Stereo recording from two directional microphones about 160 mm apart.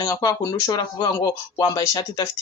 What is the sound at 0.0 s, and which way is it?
Speech, 20° left (ahead or behind).